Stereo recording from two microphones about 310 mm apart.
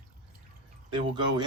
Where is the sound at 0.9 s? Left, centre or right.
Centre.